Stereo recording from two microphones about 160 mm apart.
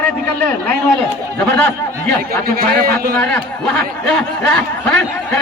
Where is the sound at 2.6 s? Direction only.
65° right (ahead or behind).